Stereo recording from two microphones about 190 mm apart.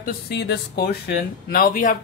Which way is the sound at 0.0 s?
60° left (ahead or behind).